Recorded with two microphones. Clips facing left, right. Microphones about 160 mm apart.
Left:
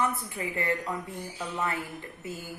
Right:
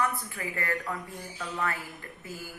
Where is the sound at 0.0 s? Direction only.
20° left (ahead or behind).